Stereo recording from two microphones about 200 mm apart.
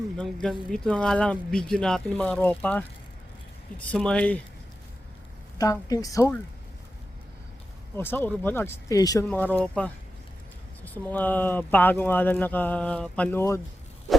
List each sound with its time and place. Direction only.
0.4 s speech: 5° left (ahead or behind)
3.8 s speech: 5° left (ahead or behind)
5.5 s speech: 20° left (ahead or behind)
7.9 s speech: 10° left (ahead or behind)